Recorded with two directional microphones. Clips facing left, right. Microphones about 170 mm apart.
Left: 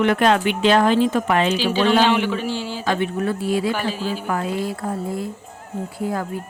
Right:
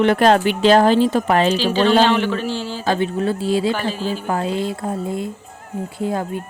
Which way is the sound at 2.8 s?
30° right (ahead or behind).